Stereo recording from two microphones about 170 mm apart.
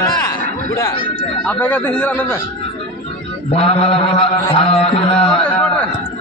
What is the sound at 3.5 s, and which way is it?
Mantra, 35° left (ahead or behind).